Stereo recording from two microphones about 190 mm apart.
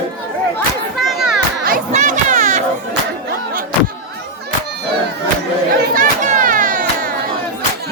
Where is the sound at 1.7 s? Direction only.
45° right (ahead or behind).